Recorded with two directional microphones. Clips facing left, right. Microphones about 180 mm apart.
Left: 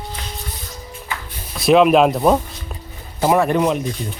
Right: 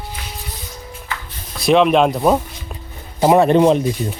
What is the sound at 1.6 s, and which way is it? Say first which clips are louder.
Speech: left 1 dB; centre (ahead or behind).